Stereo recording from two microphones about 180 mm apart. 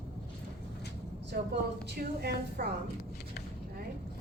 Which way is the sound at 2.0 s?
60° right (ahead or behind).